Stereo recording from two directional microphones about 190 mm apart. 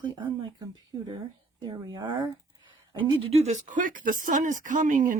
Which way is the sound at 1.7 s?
25° right (ahead or behind).